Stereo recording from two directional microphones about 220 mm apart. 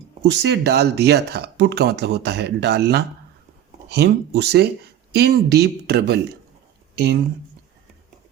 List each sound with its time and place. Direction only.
0.3 s speech: 50° right (ahead or behind)